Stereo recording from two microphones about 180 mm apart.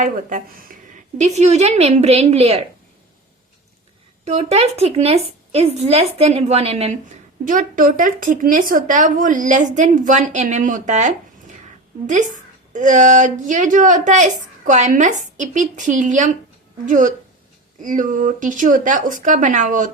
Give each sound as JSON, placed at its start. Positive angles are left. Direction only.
{"t": 0.0, "sound": "a woman's voice", "side_deg": -45}
{"t": 4.3, "sound": "a woman's voice", "side_deg": -35}
{"t": 7.4, "sound": "speech", "side_deg": -50}